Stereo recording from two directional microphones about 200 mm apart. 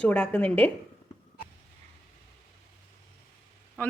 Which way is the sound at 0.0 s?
5° left (ahead or behind).